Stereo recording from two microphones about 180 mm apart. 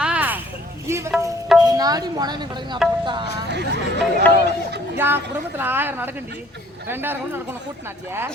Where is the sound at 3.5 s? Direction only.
65° right (ahead or behind).